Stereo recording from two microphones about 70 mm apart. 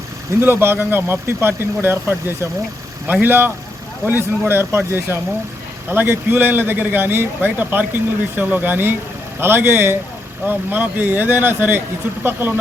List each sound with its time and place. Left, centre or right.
0.4 s a man's voice: right